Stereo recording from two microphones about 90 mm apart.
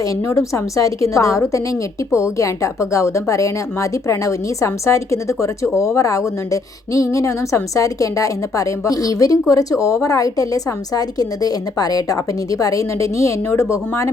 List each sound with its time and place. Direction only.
0.0 s a woman's voice: 35° left (ahead or behind)